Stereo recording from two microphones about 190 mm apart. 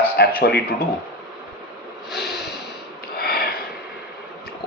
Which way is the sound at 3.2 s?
55° left (ahead or behind).